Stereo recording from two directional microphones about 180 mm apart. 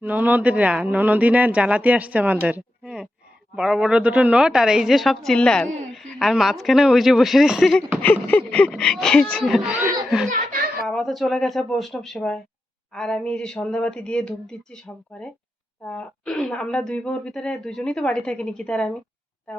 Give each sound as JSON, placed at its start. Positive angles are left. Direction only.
{"t": 0.0, "sound": "a woman's voice", "side_deg": -10}
{"t": 10.2, "sound": "speech", "side_deg": -50}
{"t": 10.8, "sound": "a woman's voice", "side_deg": 0}